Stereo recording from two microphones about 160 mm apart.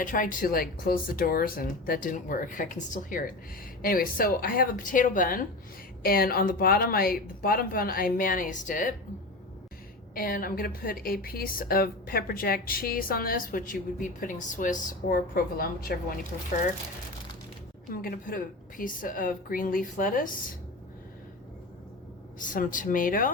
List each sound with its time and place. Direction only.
0.0 s a woman's voice: 55° left (ahead or behind)
10.2 s a woman's voice: 65° left (ahead or behind)
17.9 s a woman's voice: 65° left (ahead or behind)
22.4 s a woman's voice: 55° left (ahead or behind)